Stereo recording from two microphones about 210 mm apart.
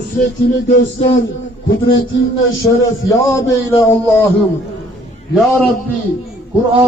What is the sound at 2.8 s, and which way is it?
A man's voice, 15° left (ahead or behind).